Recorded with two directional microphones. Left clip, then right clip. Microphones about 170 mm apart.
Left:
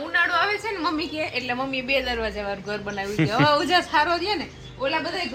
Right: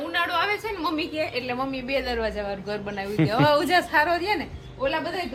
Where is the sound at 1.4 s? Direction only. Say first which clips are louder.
Left 1 dB; 25° left (ahead or behind).